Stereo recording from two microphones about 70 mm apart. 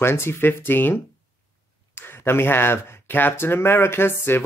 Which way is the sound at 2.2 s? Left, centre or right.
Left.